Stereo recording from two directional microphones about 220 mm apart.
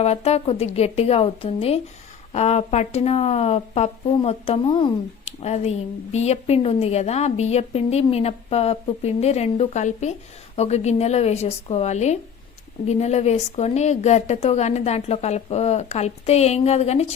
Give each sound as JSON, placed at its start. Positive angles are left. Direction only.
{"t": 0.0, "sound": "a woman's voice", "side_deg": 30}